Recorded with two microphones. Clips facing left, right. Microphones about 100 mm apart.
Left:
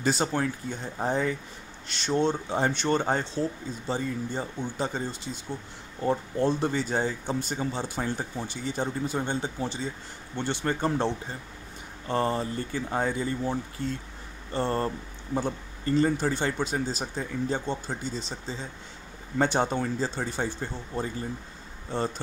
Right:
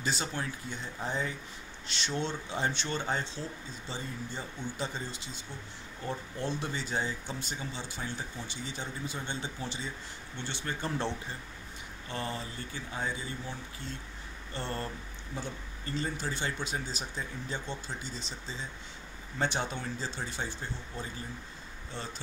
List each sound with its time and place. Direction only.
0.0 s speech: 45° left (ahead or behind)
10.3 s speech: 50° left (ahead or behind)
10.8 s speech: 35° left (ahead or behind); by 13.6 s 55° left (ahead or behind)
14.5 s speech: 40° left (ahead or behind)
15.3 s speech: 50° left (ahead or behind)